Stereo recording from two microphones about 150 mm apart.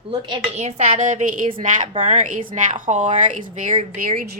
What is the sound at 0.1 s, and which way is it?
Speech, 35° right (ahead or behind).